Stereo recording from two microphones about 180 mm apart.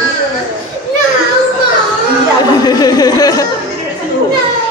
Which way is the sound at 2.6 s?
20° left (ahead or behind).